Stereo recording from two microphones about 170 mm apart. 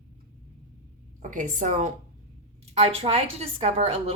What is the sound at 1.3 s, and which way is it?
A woman's voice, 45° right (ahead or behind).